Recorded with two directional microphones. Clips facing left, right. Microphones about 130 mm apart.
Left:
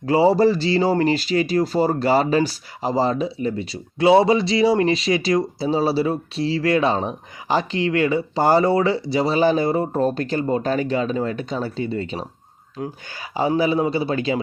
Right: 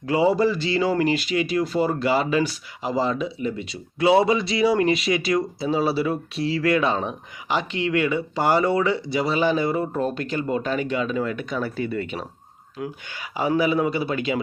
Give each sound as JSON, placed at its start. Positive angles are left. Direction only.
{"t": 0.0, "sound": "speech", "side_deg": 30}